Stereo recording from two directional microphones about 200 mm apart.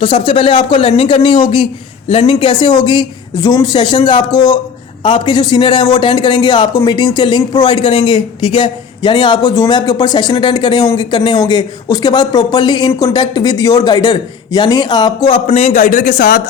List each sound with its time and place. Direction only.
0.0 s a man's voice: 25° left (ahead or behind)
15.4 s a man's voice: 35° left (ahead or behind)